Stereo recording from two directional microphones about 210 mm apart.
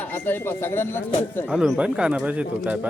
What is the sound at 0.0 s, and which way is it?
Speech, 10° left (ahead or behind).